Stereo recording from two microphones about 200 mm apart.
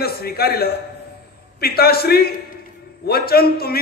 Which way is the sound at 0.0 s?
50° left (ahead or behind).